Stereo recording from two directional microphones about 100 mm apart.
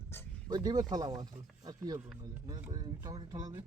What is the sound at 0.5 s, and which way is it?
Speech, 45° right (ahead or behind).